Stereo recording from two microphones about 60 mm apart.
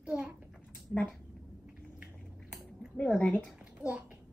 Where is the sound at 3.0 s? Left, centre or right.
Centre.